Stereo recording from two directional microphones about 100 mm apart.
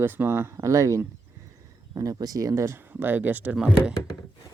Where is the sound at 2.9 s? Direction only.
20° right (ahead or behind).